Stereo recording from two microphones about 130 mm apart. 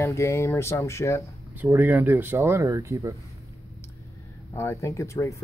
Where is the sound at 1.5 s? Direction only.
15° right (ahead or behind).